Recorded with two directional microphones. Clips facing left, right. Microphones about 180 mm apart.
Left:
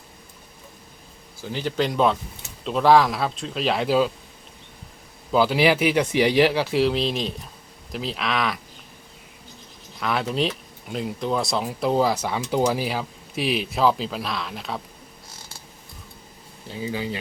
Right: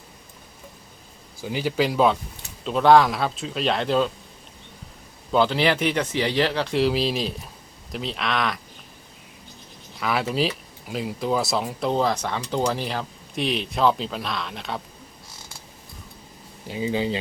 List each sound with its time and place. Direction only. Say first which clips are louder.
1.4 s speech: right 1 dB; 10° right (ahead or behind); by 4.1 s 5° left (ahead or behind)
5.3 s speech: left 2 dB; 5° left (ahead or behind)
10.0 s speech: even; centre (ahead or behind)
16.6 s speech: right 4 dB; 20° right (ahead or behind)